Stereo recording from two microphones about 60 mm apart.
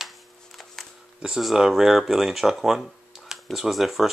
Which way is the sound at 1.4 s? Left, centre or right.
Centre.